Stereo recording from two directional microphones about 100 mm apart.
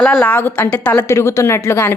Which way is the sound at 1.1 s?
30° left (ahead or behind).